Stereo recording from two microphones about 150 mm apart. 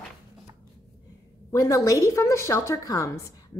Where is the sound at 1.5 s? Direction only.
20° left (ahead or behind).